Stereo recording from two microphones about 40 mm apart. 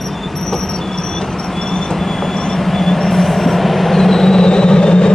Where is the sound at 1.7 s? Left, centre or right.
Centre.